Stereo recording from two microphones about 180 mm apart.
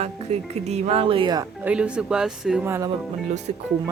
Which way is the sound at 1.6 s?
5° right (ahead or behind).